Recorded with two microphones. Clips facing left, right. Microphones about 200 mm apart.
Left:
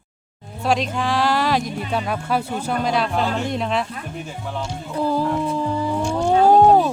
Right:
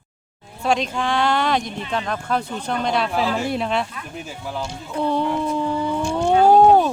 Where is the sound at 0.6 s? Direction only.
Centre (ahead or behind).